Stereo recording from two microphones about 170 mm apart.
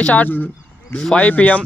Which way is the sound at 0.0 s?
10° left (ahead or behind).